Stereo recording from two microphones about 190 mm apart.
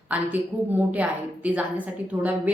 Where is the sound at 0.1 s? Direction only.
10° right (ahead or behind).